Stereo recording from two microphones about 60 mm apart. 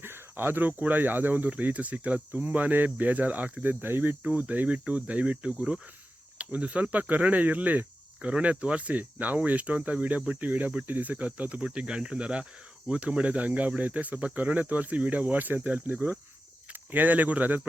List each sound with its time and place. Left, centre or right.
0.0 s cricket: right
4.4 s cricket: right
16.7 s speech: right